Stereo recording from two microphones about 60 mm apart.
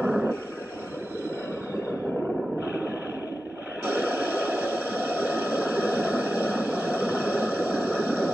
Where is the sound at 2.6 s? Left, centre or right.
Right.